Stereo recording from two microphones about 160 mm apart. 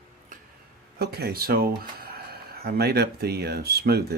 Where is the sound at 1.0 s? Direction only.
80° right.